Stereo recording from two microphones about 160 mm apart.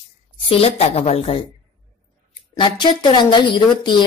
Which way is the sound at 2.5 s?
30° left (ahead or behind).